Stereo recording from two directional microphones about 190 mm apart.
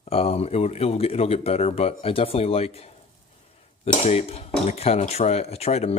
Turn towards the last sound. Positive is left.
turn(degrees=35)  # may be behind; listen again after turning